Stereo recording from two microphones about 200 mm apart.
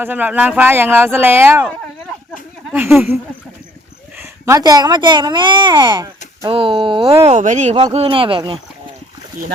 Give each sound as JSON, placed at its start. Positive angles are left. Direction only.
{"t": 0.0, "sound": "speech", "side_deg": -10}
{"t": 2.9, "sound": "speech", "side_deg": -10}
{"t": 4.2, "sound": "speech", "side_deg": -15}
{"t": 7.3, "sound": "speech", "side_deg": -35}